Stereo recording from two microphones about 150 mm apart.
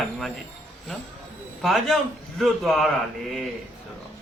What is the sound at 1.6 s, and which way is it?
Speech, centre (ahead or behind).